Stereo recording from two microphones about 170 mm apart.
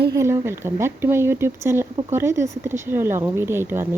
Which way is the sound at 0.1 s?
15° right (ahead or behind).